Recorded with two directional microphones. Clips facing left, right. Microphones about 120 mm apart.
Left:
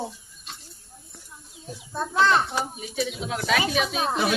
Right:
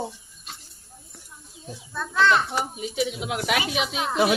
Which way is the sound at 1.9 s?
30° left (ahead or behind).